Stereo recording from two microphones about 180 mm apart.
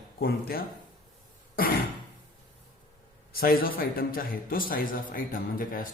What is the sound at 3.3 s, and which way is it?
A man's voice, 55° left (ahead or behind).